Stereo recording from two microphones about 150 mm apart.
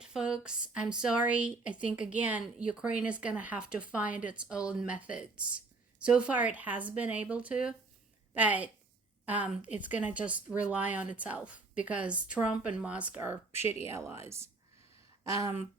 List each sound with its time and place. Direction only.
0.0 s a woman's voice: 5° right (ahead or behind)
15.2 s speech: 20° right (ahead or behind)